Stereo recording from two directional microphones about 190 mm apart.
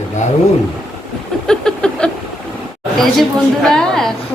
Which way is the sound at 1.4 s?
5° left (ahead or behind).